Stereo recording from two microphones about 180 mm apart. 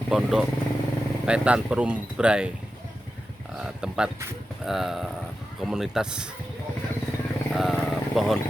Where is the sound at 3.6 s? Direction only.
5° right (ahead or behind).